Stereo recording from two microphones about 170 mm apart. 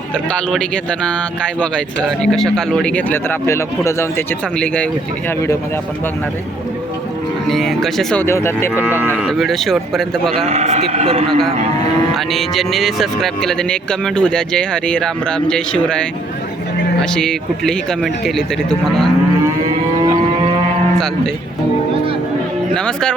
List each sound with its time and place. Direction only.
0.5 s speech: 5° left (ahead or behind)
7.4 s speech: centre (ahead or behind)
8.2 s speech: 15° left (ahead or behind)
8.8 s speech: 10° right (ahead or behind)
9.2 s speech: centre (ahead or behind)
10.4 s a man's voice: 40° right (ahead or behind)
11.3 s speech: 5° left (ahead or behind)
22.7 s speech: 5° left (ahead or behind)